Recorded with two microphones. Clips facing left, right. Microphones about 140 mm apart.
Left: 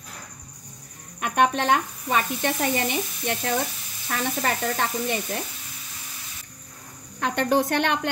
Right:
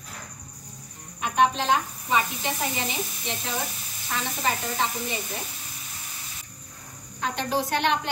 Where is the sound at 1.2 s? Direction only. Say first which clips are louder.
Left 1 dB; 60° left (ahead or behind).